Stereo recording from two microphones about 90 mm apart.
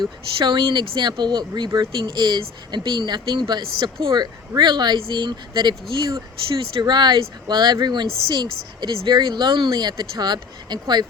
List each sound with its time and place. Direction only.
0.3 s speech: 65° right (ahead or behind)